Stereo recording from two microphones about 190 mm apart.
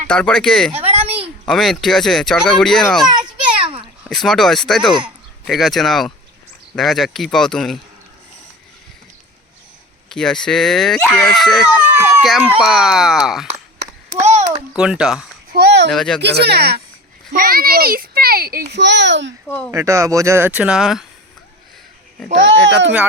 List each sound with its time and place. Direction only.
0.1 s speech: 5° left (ahead or behind)
0.9 s a sound: 30° right (ahead or behind)
1.5 s speech: centre (ahead or behind)
3.2 s children playing: 30° right (ahead or behind)
4.0 s speech: centre (ahead or behind)
10.1 s speech: 5° left (ahead or behind)
14.8 s speech: 5° right (ahead or behind)
15.5 s speech: 60° right (ahead or behind)
15.9 s speech: centre (ahead or behind)
16.2 s a child's voice: 60° right (ahead or behind)
19.5 s speech: 10° left (ahead or behind)
19.7 s speech: 15° right (ahead or behind)
22.3 s a child's voice: 70° right (ahead or behind)